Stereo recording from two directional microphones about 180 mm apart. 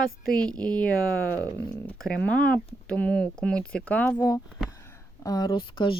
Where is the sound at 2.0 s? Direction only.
5° left (ahead or behind).